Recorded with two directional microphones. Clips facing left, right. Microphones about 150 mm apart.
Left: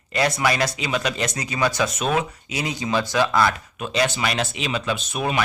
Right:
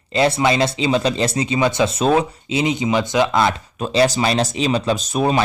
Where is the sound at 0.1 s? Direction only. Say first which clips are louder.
Right 5 dB; 30° right (ahead or behind).